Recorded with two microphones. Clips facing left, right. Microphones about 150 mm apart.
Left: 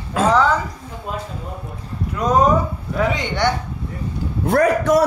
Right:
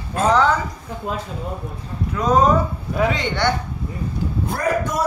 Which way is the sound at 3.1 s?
15° left (ahead or behind).